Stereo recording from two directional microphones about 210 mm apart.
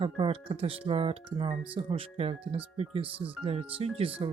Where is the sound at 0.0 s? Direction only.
25° right (ahead or behind).